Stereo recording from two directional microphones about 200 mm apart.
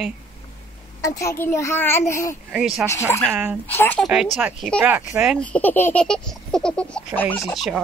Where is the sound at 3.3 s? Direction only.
10° right (ahead or behind).